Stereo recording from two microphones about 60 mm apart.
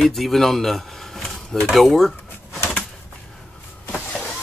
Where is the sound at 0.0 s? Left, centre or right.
Centre.